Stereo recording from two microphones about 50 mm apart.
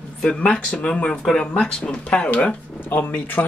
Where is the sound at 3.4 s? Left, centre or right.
Left.